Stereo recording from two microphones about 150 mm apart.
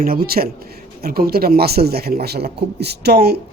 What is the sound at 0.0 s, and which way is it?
Speech, 80° right.